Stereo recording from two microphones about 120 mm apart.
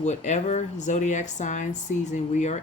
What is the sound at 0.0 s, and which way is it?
Speech, 75° left (ahead or behind).